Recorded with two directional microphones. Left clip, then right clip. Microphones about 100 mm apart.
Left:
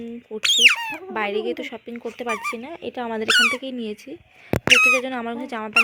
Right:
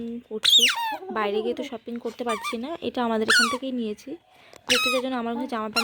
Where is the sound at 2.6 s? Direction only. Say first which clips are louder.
Right 1 dB; 40° right (ahead or behind).